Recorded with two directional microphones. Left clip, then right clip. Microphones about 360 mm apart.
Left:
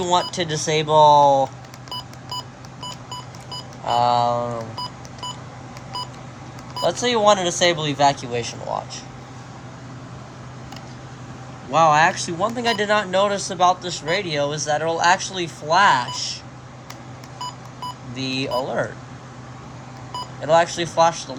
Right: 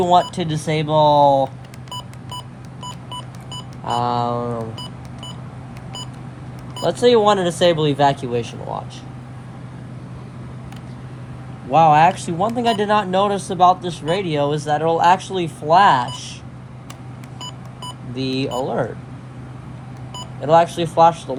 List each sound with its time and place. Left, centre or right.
0.0 s speech: centre
3.8 s speech: centre
6.8 s speech: centre
11.7 s speech: centre
18.2 s speech: centre
18.5 s speech: centre
20.4 s speech: centre